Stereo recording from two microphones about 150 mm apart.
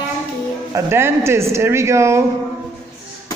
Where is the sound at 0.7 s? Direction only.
15° right (ahead or behind).